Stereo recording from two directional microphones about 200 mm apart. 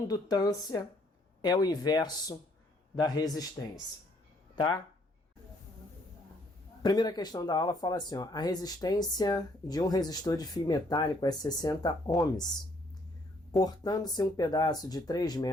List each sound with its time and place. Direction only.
0.1 s speech: 20° left (ahead or behind)
6.8 s speech: 20° left (ahead or behind)
13.6 s speech: 20° left (ahead or behind)